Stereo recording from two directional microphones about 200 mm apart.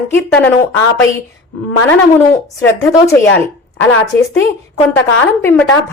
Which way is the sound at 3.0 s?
15° left (ahead or behind).